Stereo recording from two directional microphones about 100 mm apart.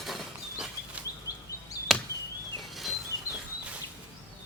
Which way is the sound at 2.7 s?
Centre (ahead or behind).